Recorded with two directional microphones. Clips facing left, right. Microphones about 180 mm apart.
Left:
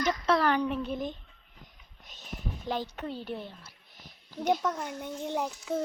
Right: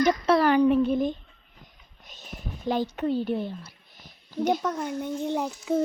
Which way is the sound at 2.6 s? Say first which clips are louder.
Right 9 dB; 10° right (ahead or behind).